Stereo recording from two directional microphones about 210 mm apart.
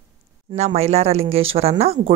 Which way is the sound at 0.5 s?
30° right (ahead or behind).